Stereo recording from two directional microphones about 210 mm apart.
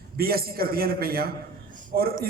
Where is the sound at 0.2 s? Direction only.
45° right (ahead or behind).